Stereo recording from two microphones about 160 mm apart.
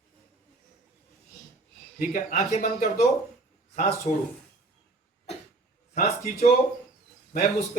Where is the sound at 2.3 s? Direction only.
45° left (ahead or behind).